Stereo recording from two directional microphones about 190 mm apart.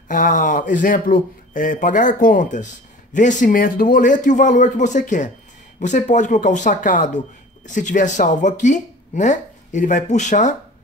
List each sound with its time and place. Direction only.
0.1 s speech: 45° left (ahead or behind)